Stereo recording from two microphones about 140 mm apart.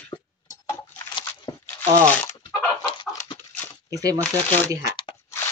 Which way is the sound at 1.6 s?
10° left (ahead or behind).